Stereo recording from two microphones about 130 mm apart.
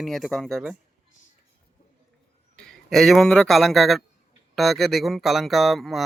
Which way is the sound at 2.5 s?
5° left (ahead or behind).